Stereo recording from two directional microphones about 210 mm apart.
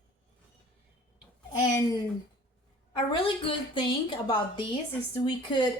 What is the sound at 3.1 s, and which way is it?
A woman's voice, 25° left (ahead or behind).